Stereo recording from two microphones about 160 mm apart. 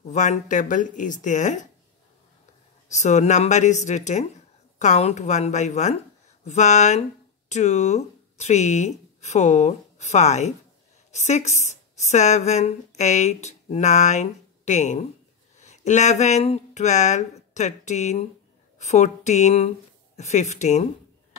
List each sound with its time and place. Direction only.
0.0 s speech: 45° left (ahead or behind)
2.9 s speech: 45° left (ahead or behind)